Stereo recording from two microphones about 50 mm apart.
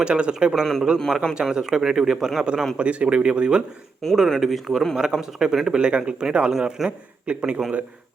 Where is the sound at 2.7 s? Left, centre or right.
Right.